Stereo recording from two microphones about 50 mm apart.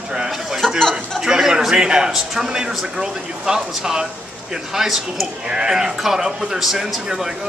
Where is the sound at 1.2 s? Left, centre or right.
Centre.